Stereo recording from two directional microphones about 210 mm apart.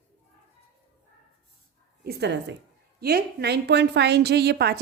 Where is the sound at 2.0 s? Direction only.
55° right (ahead or behind).